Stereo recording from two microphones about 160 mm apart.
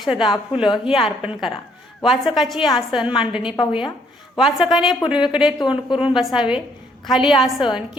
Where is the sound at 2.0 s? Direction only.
Centre (ahead or behind).